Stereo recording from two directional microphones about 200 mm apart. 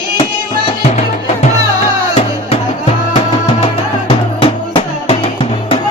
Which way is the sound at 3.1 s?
30° left (ahead or behind).